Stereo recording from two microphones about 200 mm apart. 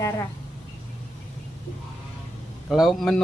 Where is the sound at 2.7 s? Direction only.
Centre (ahead or behind).